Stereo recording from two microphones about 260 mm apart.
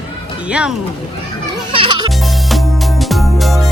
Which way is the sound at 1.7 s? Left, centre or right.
Centre.